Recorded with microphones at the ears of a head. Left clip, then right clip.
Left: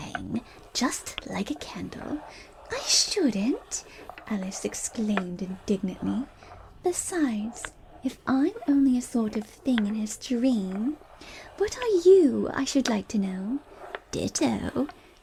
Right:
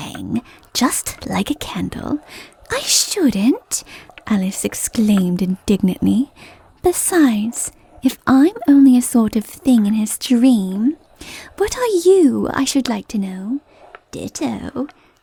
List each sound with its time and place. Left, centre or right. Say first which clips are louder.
0.0 s speech: right 8 dB; right